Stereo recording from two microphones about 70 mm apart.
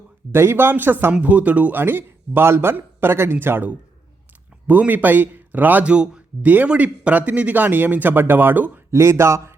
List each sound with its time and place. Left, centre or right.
0.3 s speech: right
1.1 s a man's voice: centre
8.9 s speech: right